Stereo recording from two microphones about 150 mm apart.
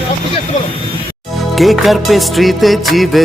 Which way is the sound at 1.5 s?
Centre (ahead or behind).